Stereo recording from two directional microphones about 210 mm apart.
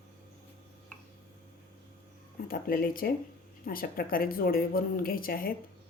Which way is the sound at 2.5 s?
45° left (ahead or behind).